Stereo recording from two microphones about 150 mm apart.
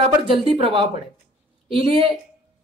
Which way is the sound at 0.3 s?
40° right (ahead or behind).